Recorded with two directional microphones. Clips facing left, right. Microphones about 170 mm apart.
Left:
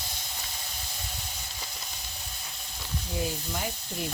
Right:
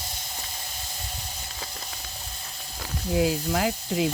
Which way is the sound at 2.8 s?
90° right.